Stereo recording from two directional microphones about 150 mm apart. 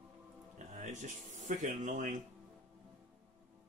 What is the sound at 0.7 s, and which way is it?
Speech, 55° right (ahead or behind).